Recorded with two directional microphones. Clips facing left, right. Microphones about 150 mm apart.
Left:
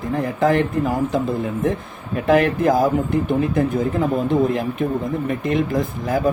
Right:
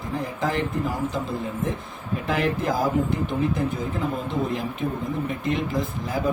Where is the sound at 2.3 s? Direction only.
55° left (ahead or behind).